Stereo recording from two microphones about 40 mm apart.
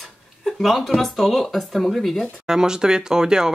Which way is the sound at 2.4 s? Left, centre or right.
Centre.